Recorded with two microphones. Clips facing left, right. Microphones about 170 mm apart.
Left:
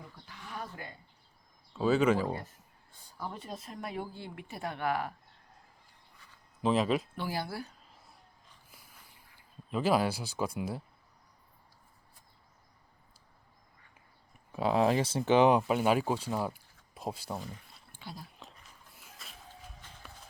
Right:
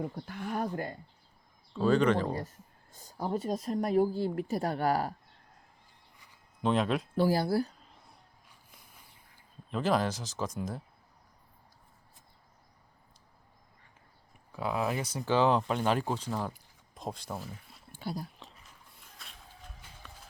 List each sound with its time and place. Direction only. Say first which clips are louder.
0.0 s speech: right 13 dB; 50° right (ahead or behind)
1.7 s speech: right 1 dB; 5° left (ahead or behind)
2.9 s speech: right 8 dB; 45° right (ahead or behind)
6.1 s a sound: left 2 dB; 15° right (ahead or behind)
6.6 s speech: even; 5° left (ahead or behind)
7.2 s speech: right 10 dB; 40° right (ahead or behind)
9.6 s speech: left 1 dB; 5° left (ahead or behind)
14.5 s speech: left 5 dB; 25° left (ahead or behind); by 17.6 s centre (ahead or behind)
17.9 s dog: right 9 dB; 40° right (ahead or behind)
18.9 s music: left 2 dB; 5° left (ahead or behind)